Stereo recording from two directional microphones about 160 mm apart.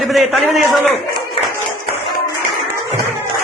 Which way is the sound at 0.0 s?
Centre (ahead or behind).